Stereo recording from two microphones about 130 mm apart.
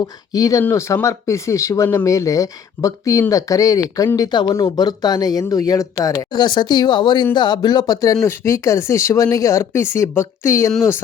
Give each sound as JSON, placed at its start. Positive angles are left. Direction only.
{"t": 0.3, "sound": "speech", "side_deg": 25}